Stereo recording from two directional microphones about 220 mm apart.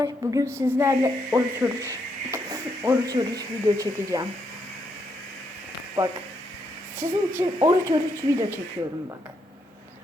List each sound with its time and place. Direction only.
0.0 s a woman's voice: 15° right (ahead or behind)
7.0 s a woman's voice: 10° right (ahead or behind)